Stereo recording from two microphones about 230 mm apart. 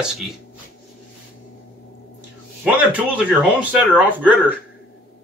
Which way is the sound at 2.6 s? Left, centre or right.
Centre.